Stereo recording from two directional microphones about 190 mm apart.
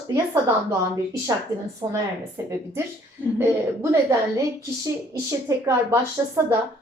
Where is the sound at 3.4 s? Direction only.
15° right (ahead or behind).